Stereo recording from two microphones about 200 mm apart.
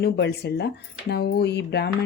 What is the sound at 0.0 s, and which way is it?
Speech, 55° left (ahead or behind).